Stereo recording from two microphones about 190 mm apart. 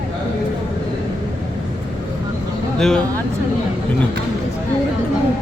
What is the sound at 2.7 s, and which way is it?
Speech, 5° left (ahead or behind).